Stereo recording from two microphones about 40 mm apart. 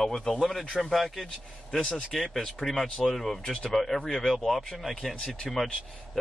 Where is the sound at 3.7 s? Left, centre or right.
Centre.